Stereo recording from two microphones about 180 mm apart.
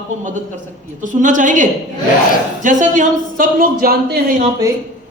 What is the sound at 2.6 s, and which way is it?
Speech, 45° right (ahead or behind).